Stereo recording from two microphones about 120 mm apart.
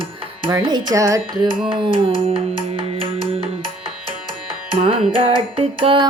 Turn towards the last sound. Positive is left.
turn(degrees=-45)  # may be behind; listen again after turning